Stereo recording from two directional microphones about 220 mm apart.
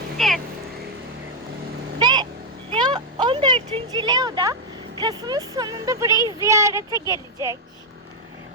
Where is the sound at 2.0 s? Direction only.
20° right (ahead or behind).